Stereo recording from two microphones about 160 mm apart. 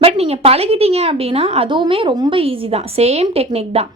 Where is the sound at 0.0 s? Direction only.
40° right (ahead or behind).